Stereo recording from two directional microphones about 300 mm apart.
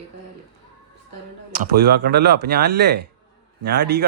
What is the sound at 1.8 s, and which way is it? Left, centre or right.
Speech, right.